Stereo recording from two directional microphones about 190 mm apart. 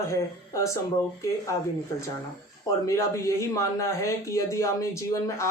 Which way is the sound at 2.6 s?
15° left (ahead or behind).